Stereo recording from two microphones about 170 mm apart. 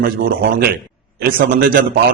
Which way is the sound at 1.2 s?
60° right (ahead or behind).